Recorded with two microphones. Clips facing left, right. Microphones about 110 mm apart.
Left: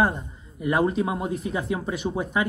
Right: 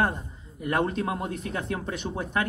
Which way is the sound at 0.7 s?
5° left (ahead or behind).